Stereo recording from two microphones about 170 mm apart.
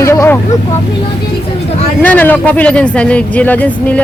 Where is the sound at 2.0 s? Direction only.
10° left (ahead or behind).